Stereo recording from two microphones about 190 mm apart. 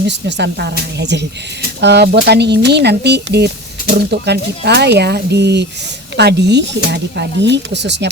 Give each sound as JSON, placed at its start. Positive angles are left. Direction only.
{"t": 0.1, "sound": "speech", "side_deg": -65}